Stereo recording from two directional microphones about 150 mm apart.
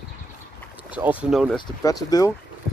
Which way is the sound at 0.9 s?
5° right (ahead or behind).